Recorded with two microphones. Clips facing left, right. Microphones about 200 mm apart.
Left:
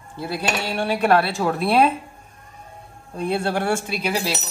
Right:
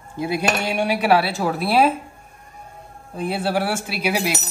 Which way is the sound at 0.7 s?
10° right (ahead or behind).